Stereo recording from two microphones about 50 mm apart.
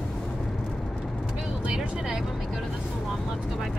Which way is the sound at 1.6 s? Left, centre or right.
Right.